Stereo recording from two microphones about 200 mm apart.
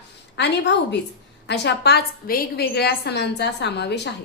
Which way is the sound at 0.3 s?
60° left (ahead or behind).